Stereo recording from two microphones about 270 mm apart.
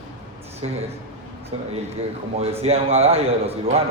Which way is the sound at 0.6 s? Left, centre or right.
Right.